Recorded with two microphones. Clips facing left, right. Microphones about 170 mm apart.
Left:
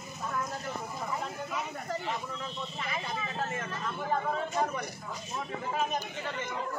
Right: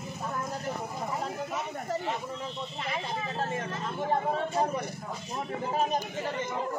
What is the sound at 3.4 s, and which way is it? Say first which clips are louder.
Vehicle: right 3 dB; 30° right (ahead or behind).